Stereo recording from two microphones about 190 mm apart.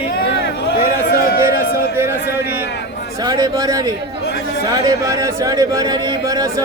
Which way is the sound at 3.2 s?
20° right (ahead or behind).